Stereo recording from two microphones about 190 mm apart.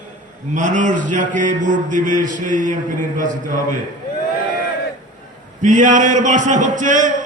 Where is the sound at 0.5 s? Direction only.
40° right (ahead or behind).